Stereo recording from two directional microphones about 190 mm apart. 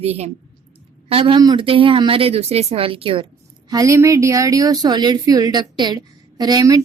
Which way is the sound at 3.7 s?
15° right (ahead or behind).